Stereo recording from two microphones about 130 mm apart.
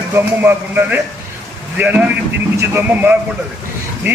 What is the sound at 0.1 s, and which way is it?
A man's voice, 15° right (ahead or behind).